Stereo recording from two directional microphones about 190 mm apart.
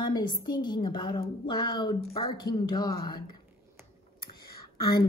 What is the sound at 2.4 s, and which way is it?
Speech, 20° left (ahead or behind).